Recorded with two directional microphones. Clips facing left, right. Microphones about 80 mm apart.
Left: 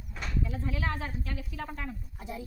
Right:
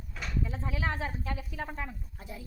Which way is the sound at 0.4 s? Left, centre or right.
Right.